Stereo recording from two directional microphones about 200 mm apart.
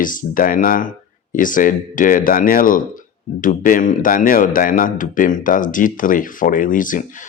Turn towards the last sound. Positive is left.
turn(degrees=40)  # may be behind; listen again after turning